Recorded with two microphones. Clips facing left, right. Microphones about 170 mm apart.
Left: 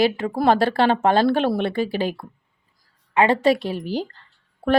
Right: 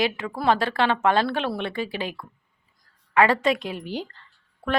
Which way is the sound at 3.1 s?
25° left (ahead or behind).